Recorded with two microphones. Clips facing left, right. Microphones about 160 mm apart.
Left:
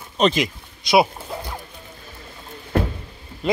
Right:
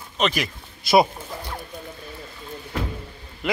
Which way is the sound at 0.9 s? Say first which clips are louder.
Even; 5° right (ahead or behind).